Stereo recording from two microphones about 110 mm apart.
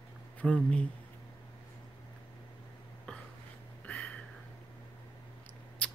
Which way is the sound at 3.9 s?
10° left (ahead or behind).